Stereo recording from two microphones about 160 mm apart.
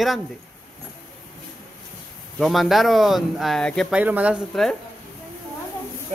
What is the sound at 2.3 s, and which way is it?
Speech, centre (ahead or behind).